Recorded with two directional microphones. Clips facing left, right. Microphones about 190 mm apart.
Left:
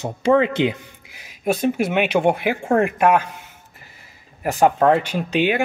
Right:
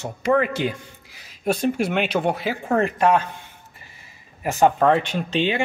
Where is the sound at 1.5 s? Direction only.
5° left (ahead or behind).